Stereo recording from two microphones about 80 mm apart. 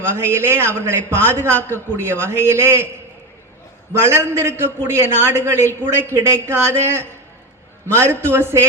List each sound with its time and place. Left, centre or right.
0.2 s a man's voice: right
3.9 s a man's voice: right